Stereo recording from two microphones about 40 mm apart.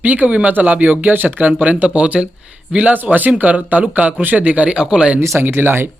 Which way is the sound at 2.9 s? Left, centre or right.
Right.